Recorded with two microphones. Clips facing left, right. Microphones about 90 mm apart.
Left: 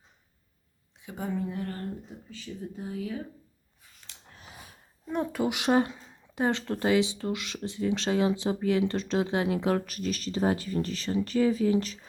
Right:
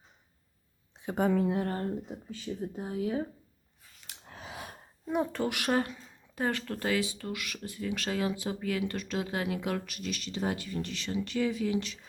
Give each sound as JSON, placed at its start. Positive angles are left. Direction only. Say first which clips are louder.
{"t": 1.1, "sound": "speech", "louder": "right 6 dB", "side_deg": -80}
{"t": 1.6, "sound": "speech", "louder": "right 3 dB", "side_deg": -55}
{"t": 2.8, "sound": "speech", "louder": "right 3 dB", "side_deg": -40}
{"t": 4.3, "sound": "a sound", "louder": "right 7 dB", "side_deg": -90}
{"t": 5.3, "sound": "speech", "louder": "left 4 dB", "side_deg": 15}